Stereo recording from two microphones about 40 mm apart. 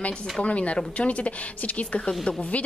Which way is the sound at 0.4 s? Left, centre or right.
Left.